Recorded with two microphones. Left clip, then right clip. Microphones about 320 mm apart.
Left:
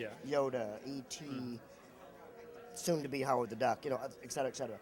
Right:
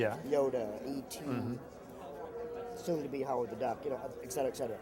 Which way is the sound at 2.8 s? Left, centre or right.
Left.